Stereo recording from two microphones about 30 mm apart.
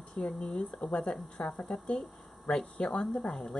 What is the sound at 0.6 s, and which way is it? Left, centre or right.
Speech, centre.